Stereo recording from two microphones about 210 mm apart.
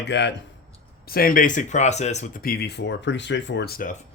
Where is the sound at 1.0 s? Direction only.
45° left (ahead or behind).